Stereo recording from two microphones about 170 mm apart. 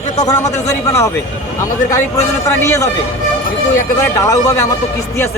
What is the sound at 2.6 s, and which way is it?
Speech, 20° left (ahead or behind).